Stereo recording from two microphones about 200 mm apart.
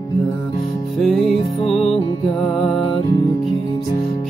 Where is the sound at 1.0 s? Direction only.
Centre (ahead or behind).